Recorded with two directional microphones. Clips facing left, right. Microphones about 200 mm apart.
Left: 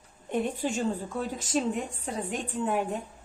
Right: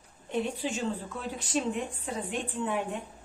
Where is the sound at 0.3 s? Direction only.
50° left (ahead or behind).